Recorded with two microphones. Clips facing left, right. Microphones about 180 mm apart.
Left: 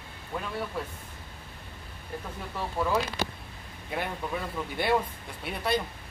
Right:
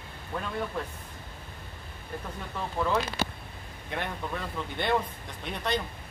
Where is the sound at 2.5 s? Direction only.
5° left (ahead or behind).